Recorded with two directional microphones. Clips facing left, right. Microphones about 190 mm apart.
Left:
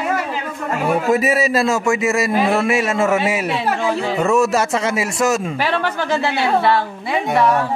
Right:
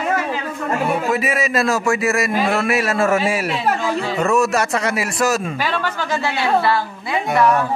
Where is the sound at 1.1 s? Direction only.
40° left (ahead or behind).